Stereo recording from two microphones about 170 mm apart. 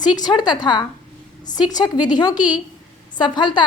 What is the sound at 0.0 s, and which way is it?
A woman's voice, 25° left (ahead or behind).